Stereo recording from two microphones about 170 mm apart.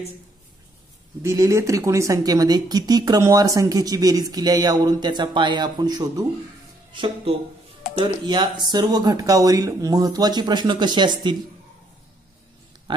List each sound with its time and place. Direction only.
1.2 s speech: 15° right (ahead or behind)